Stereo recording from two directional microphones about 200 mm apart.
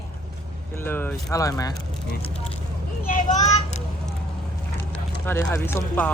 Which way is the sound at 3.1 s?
35° left (ahead or behind).